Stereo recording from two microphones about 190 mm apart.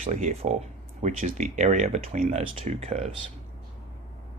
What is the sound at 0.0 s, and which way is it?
Speech, 40° right (ahead or behind).